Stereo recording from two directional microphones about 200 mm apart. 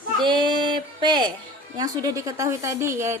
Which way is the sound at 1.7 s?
20° right (ahead or behind).